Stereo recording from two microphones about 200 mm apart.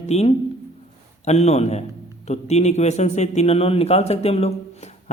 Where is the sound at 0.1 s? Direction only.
30° left (ahead or behind).